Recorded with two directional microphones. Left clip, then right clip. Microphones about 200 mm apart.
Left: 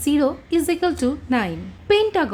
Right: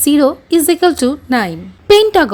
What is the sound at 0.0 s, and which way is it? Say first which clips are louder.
A woman's voice: right 8 dB; 30° right (ahead or behind).